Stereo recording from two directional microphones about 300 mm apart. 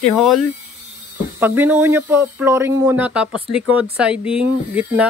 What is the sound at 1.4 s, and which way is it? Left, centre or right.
Speech, centre.